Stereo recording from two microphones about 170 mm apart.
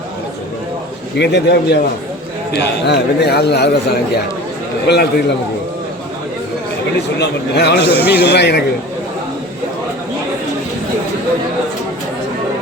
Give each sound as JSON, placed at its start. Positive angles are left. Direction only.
{"t": 1.2, "sound": "a man's voice", "side_deg": 80}
{"t": 7.2, "sound": "a man's voice", "side_deg": 75}